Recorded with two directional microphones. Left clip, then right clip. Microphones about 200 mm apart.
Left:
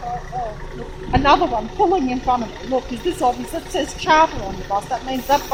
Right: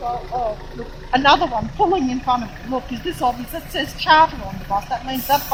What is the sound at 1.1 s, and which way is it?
Speech, centre (ahead or behind).